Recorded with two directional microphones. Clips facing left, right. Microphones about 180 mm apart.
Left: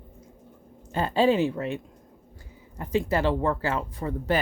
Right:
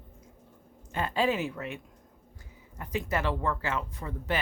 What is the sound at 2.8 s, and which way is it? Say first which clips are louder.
Speech: left 6 dB; 30° left (ahead or behind).